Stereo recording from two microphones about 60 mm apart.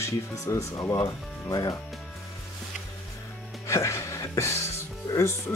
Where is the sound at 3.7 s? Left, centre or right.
Left.